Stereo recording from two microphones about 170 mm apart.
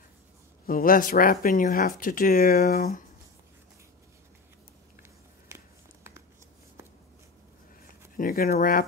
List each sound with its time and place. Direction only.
0.7 s speech: 55° left (ahead or behind)
8.2 s speech: 60° left (ahead or behind)